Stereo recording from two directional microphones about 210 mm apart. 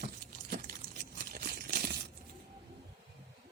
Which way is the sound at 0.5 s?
45° right (ahead or behind).